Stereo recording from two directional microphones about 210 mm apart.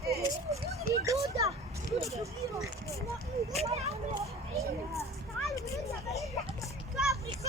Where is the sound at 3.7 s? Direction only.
30° right (ahead or behind).